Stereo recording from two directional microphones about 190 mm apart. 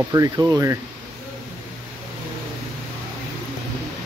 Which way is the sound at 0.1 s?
20° right (ahead or behind).